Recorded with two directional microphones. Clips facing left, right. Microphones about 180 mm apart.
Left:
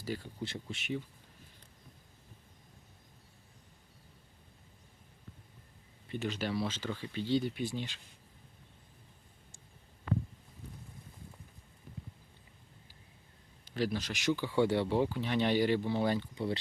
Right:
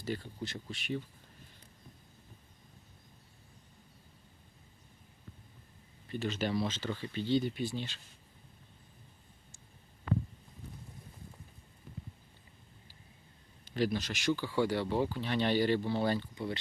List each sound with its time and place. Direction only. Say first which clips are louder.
0.0 s speech: right 1 dB; 10° left (ahead or behind)
0.4 s speech: left 2 dB; 25° left (ahead or behind)
6.1 s speech: right 1 dB; 15° left (ahead or behind)
13.7 s speech: right 2 dB; 5° left (ahead or behind)
14.1 s speech: even; 20° left (ahead or behind)
16.3 s speech: left 3 dB; 30° left (ahead or behind)